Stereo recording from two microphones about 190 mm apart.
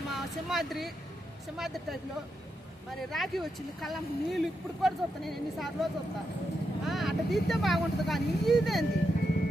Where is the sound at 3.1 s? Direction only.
Centre (ahead or behind).